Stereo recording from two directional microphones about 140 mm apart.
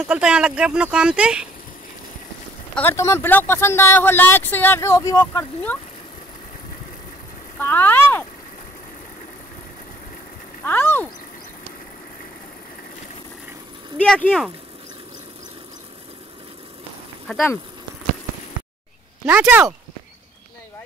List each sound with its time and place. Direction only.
0.0 s speech: 5° right (ahead or behind)
2.7 s speech: 15° left (ahead or behind)
7.5 s speech: 15° left (ahead or behind)
10.6 s a sound: 15° left (ahead or behind)
13.9 s speech: 10° left (ahead or behind)
17.3 s speech: 5° left (ahead or behind)
19.5 s speech: 10° right (ahead or behind)